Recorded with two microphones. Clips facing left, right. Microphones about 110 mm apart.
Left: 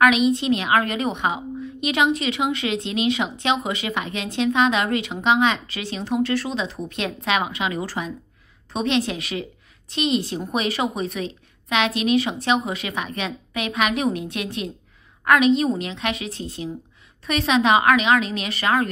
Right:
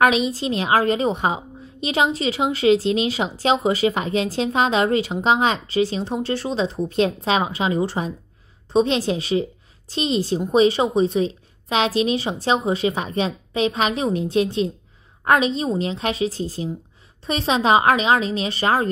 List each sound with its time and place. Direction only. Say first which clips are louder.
0.0 s a woman's voice: left 1 dB; 35° right (ahead or behind)